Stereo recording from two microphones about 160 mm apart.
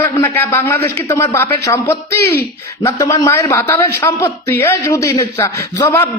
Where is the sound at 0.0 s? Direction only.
15° left (ahead or behind).